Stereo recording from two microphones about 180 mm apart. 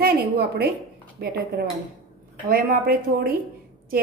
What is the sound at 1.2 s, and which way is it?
Speech, 60° right (ahead or behind).